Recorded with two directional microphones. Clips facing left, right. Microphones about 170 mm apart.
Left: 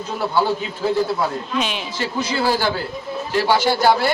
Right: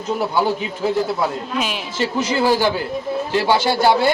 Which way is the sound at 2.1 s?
20° right (ahead or behind).